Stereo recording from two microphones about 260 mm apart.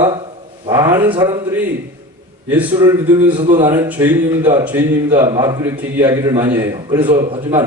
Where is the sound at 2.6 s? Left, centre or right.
Centre.